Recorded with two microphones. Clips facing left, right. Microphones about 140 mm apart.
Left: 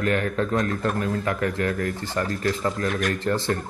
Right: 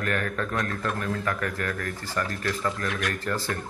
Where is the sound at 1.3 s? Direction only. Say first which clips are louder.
Left 5 dB; 20° left (ahead or behind).